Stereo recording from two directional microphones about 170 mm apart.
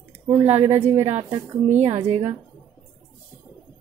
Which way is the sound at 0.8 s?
15° right (ahead or behind).